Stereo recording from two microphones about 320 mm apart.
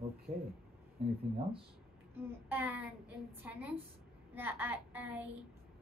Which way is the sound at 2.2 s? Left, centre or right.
Centre.